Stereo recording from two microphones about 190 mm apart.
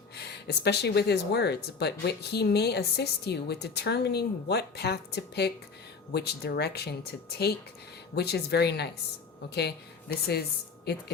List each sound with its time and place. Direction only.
0.3 s speech: 60° left (ahead or behind)